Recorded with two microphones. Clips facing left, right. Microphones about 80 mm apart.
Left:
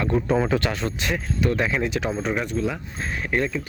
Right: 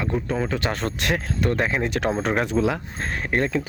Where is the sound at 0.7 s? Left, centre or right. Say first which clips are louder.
Right 2 dB; right.